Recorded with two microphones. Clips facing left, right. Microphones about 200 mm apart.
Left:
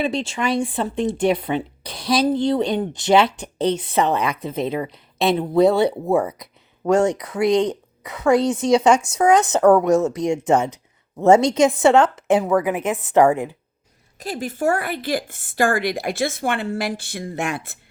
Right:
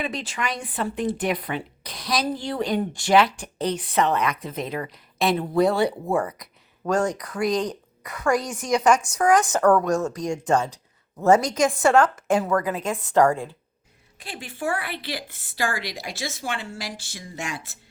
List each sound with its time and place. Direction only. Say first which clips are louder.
0.0 s speech: left 7 dB; 30° left (ahead or behind)
6.8 s speech: left 6 dB; 25° left (ahead or behind)
14.2 s speech: left 8 dB; 40° left (ahead or behind); by 17.7 s 60° left (ahead or behind)